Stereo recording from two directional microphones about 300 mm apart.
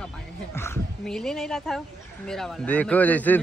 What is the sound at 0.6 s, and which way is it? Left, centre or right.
Speech, centre.